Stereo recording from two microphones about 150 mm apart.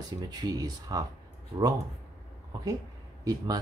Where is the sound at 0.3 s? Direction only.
25° right (ahead or behind).